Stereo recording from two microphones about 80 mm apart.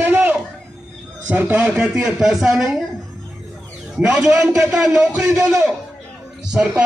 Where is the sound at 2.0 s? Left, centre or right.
Centre.